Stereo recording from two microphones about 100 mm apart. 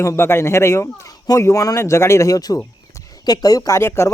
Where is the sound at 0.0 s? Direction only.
25° left (ahead or behind).